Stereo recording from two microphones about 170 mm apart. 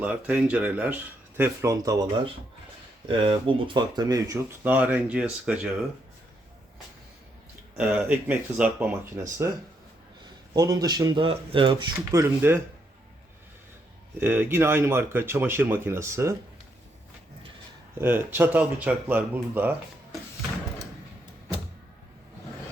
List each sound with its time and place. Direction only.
0.0 s speech: 10° right (ahead or behind)
1.4 s speech: 20° right (ahead or behind)
3.1 s speech: 30° right (ahead or behind)
4.6 s speech: 10° right (ahead or behind)
7.8 s speech: 10° right (ahead or behind)
10.5 s speech: 20° right (ahead or behind)
11.9 s speech: 15° right (ahead or behind)
14.2 s speech: 10° right (ahead or behind)
18.0 s speech: 10° right (ahead or behind)